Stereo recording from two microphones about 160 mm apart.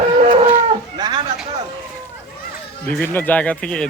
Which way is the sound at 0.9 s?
25° right (ahead or behind).